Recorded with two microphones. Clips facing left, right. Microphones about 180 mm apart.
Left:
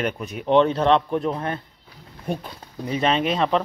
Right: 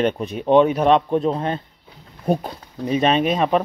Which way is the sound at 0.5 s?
15° right (ahead or behind).